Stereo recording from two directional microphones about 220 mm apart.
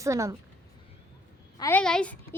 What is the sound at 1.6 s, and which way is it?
Speech, 10° left (ahead or behind).